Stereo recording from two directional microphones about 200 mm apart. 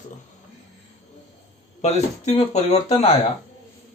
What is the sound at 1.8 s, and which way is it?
Speech, 35° left (ahead or behind).